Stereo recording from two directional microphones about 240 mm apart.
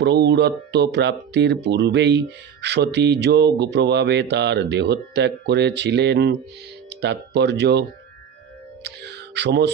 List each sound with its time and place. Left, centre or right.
0.0 s speech: right
8.8 s music: right